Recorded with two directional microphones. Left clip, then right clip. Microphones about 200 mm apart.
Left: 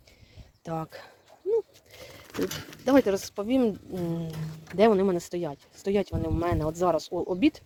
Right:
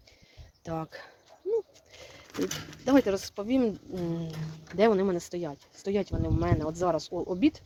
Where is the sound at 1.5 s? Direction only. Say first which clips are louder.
Left 3 dB; 10° left (ahead or behind).